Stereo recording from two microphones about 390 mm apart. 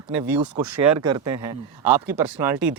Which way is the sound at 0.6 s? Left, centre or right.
Right.